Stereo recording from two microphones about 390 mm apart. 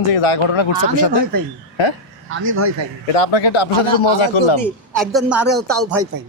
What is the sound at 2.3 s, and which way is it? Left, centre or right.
Speech, right.